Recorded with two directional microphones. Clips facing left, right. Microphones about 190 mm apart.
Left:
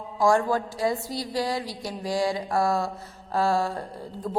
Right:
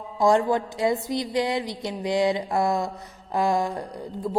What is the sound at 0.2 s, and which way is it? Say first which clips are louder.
Music: right 2 dB; 20° right (ahead or behind).